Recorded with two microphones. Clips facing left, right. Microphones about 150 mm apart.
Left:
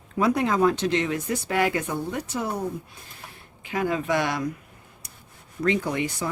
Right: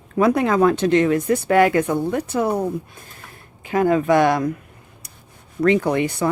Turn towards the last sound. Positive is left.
turn(degrees=-60)  # may be behind; listen again after turning